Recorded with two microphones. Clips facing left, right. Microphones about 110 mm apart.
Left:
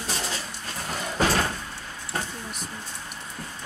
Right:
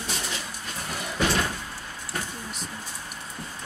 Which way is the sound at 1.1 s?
40° left (ahead or behind).